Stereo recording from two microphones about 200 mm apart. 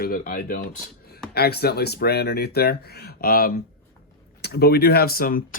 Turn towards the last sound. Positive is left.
turn(degrees=45)  # may be behind; listen again after turning